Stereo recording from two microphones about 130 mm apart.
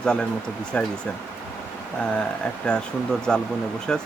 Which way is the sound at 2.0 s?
5° left (ahead or behind).